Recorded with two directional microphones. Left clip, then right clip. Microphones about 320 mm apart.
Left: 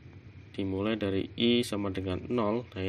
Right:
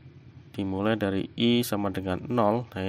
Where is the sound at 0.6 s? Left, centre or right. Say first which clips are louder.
Right 4 dB; right.